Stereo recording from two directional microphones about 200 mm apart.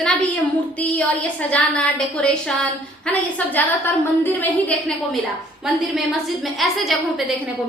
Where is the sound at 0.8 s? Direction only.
5° left (ahead or behind).